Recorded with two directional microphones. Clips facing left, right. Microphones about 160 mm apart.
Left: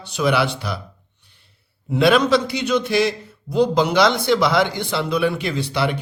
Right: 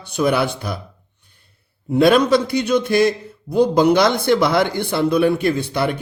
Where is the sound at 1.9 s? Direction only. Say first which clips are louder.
Right 2 dB; 50° right (ahead or behind).